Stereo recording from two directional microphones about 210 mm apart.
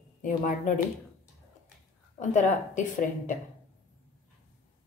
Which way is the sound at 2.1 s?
35° left (ahead or behind).